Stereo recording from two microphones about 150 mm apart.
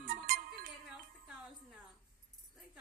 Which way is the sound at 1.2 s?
5° right (ahead or behind).